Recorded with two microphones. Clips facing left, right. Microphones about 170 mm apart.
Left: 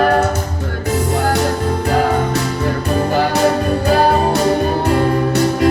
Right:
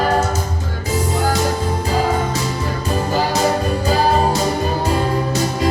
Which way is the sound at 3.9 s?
60° left (ahead or behind).